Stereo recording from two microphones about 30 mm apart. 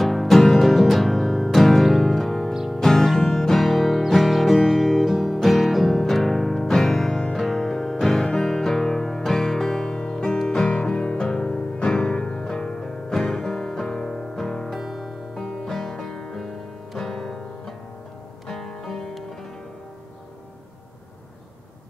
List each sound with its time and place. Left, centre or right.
0.0 s music: centre
7.3 s music: centre
10.9 s music: left
12.8 s music: centre
14.7 s music: centre
15.3 s music: centre